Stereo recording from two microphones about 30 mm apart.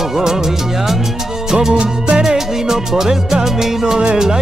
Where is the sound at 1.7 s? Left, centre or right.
Right.